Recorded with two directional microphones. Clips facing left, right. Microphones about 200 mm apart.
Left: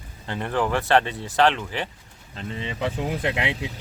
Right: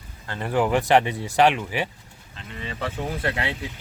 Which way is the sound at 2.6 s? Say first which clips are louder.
Left 2 dB; 15° left (ahead or behind).